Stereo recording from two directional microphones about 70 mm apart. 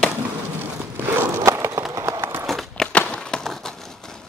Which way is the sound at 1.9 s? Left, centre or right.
Right.